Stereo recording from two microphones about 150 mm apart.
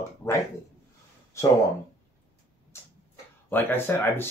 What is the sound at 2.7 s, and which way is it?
Tick-tock, 15° left (ahead or behind).